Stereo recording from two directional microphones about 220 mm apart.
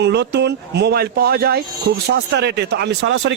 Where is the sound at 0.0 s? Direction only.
50° right (ahead or behind).